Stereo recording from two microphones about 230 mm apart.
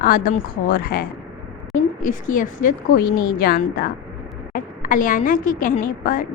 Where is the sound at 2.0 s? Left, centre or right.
Left.